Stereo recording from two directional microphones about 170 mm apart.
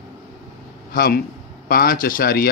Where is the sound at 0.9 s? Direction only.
60° left (ahead or behind).